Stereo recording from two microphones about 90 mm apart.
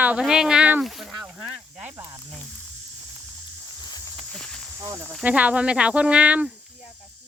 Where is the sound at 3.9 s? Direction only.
45° left (ahead or behind).